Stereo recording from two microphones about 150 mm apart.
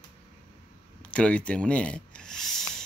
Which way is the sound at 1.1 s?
10° left (ahead or behind).